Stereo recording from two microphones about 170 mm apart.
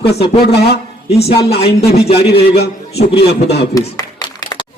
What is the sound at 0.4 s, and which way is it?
Speech, 70° left (ahead or behind).